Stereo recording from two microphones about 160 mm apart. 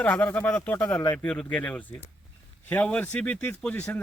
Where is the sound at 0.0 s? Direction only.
10° left (ahead or behind).